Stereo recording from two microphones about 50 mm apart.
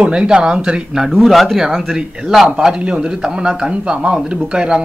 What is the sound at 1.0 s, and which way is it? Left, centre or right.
Speech, centre.